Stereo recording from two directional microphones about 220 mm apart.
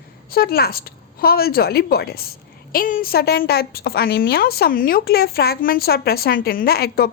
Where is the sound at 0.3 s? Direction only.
45° left (ahead or behind).